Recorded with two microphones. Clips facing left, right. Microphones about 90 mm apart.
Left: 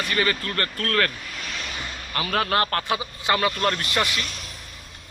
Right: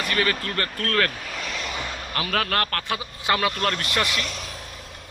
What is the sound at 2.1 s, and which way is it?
Speech, centre (ahead or behind).